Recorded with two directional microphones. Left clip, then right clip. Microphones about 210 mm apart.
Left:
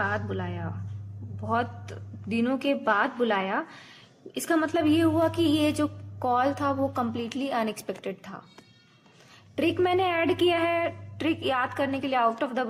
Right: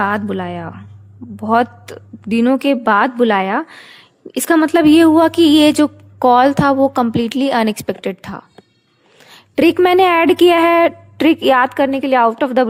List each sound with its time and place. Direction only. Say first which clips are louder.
0.0 s a woman's voice: right 11 dB; 55° right (ahead or behind)